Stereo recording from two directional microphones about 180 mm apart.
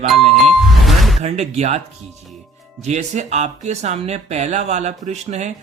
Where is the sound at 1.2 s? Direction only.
40° right (ahead or behind).